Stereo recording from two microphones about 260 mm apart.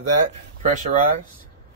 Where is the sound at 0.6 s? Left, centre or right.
Right.